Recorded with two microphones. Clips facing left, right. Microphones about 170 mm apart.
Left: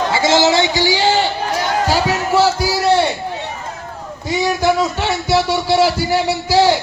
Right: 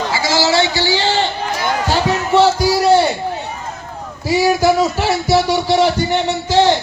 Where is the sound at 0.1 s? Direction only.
25° left (ahead or behind); by 3.1 s centre (ahead or behind).